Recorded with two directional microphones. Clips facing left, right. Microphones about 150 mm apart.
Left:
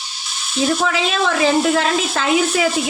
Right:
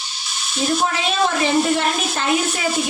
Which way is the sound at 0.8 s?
90° left.